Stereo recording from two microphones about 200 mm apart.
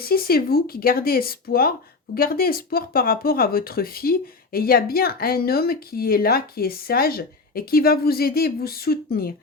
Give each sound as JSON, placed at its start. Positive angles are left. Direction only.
{"t": 0.0, "sound": "speech", "side_deg": 50}